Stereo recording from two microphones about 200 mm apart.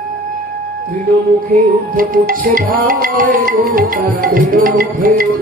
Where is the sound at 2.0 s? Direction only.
45° right (ahead or behind).